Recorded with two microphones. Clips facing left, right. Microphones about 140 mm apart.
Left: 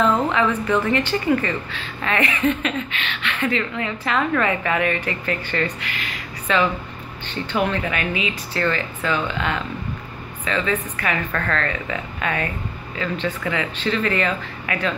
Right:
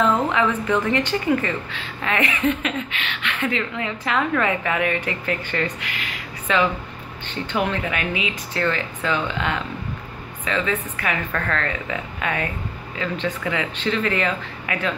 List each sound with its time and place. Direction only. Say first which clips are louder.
0.4 s a woman's voice: left 1 dB; 15° right (ahead or behind)